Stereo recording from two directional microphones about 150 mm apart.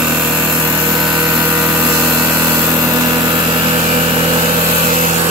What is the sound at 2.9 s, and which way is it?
Vehicle, 25° right (ahead or behind).